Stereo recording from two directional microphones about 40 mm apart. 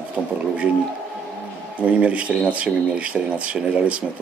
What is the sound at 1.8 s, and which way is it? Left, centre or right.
Speech, right.